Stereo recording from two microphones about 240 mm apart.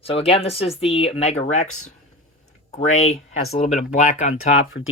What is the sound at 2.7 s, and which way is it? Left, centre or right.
Speech, left.